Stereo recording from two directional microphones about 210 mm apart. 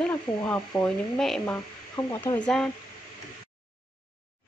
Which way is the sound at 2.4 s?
5° left (ahead or behind).